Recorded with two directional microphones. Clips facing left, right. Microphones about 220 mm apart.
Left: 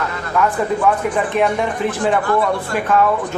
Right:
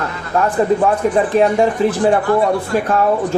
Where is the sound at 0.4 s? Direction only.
35° right (ahead or behind).